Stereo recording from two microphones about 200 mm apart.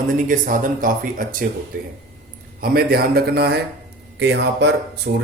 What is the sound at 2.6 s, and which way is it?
Speech, 50° right (ahead or behind).